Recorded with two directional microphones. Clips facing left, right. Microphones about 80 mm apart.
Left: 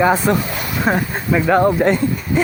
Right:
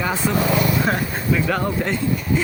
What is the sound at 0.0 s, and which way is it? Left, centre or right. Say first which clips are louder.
Speech: left 6 dB; left.